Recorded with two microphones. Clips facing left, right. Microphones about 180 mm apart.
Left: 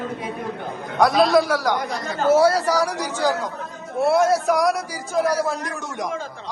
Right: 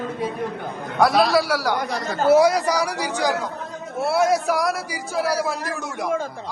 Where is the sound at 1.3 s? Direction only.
5° right (ahead or behind).